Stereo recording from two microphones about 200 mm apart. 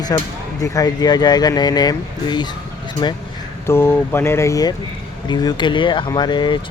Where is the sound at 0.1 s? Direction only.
15° left (ahead or behind).